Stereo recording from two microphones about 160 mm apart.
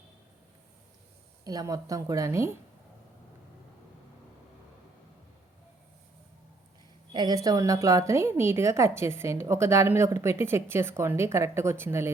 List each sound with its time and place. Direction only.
1.5 s a woman's voice: 20° right (ahead or behind)
7.1 s a woman's voice: 25° right (ahead or behind)